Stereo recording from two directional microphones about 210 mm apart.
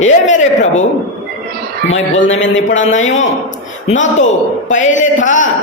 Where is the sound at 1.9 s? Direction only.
65° left (ahead or behind).